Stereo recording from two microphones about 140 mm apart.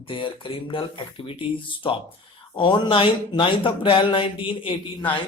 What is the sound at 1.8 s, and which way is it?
A man's voice, 35° left (ahead or behind).